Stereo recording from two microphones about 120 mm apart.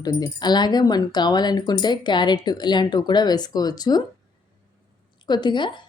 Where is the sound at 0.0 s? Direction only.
30° left (ahead or behind).